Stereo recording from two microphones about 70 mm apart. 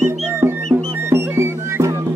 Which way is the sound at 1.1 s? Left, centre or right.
Right.